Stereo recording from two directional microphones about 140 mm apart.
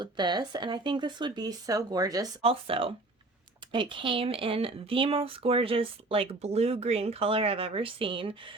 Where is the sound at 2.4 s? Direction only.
40° right (ahead or behind).